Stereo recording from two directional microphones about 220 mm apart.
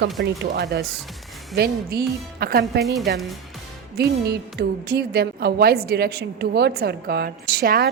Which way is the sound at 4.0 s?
45° right (ahead or behind).